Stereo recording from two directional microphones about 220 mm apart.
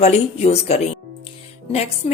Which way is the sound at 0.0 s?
30° left (ahead or behind).